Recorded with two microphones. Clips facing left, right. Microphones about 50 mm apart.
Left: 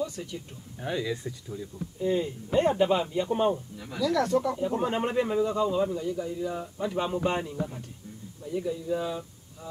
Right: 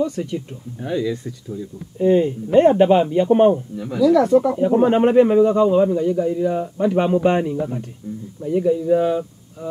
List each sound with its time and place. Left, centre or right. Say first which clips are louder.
0.0 s a man's voice: right 11 dB; right
0.7 s speech: right 8 dB; centre
2.0 s a man's voice: right 12 dB; right
3.8 s speech: right 11 dB; centre
4.6 s a man's voice: right 12 dB; right
8.5 s speech: right 13 dB; right